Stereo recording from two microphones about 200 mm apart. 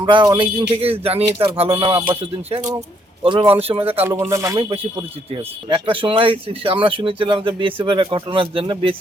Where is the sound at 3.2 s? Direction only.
25° right (ahead or behind).